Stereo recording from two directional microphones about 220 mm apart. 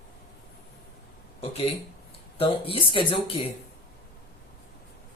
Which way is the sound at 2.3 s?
25° left (ahead or behind).